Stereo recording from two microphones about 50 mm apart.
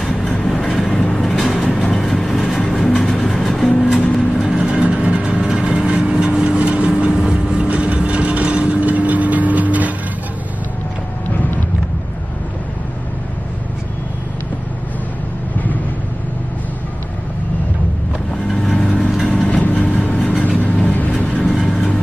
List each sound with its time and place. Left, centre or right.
0.5 s train: centre
1.2 s vehicle: centre
4.4 s vehicle: centre
4.8 s vehicle: right
18.5 s vehicle: centre
19.6 s vehicle: left
21.4 s vehicle: centre